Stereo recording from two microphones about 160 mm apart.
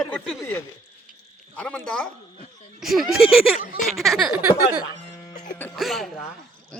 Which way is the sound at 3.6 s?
55° left (ahead or behind).